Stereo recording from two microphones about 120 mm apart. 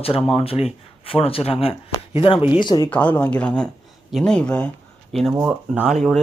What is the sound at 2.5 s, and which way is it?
Speech, 40° left (ahead or behind).